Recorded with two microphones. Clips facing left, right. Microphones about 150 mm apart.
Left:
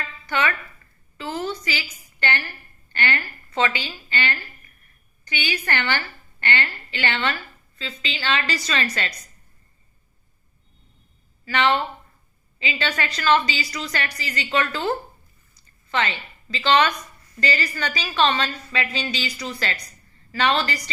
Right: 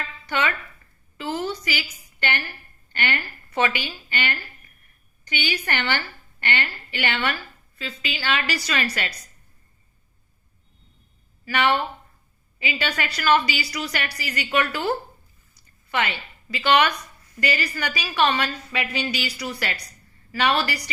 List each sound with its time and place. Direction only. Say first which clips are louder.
0.3 s speech: left 1 dB; 15° right (ahead or behind)
1.2 s a sound: right 1 dB; 15° right (ahead or behind)
2.9 s a woman's voice: left 1 dB; 15° right (ahead or behind)
11.4 s a woman's voice: left 1 dB; 10° right (ahead or behind)